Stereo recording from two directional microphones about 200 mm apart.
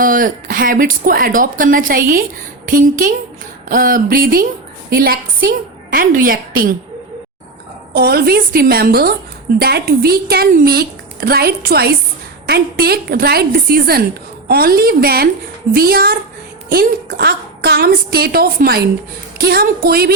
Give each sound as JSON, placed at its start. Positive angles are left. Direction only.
{"t": 0.0, "sound": "a woman's voice", "side_deg": -45}
{"t": 7.9, "sound": "a woman's voice", "side_deg": -50}